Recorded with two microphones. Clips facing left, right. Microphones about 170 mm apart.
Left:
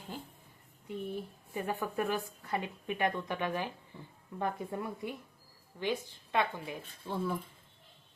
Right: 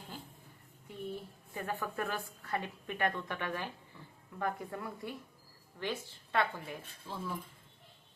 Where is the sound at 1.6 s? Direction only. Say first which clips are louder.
Left 3 dB; 15° left (ahead or behind).